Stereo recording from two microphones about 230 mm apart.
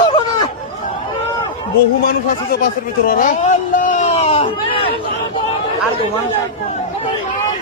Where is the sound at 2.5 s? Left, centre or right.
Left.